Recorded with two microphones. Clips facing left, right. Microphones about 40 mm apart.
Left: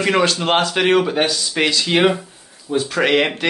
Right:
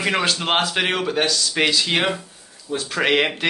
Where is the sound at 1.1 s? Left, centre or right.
Centre.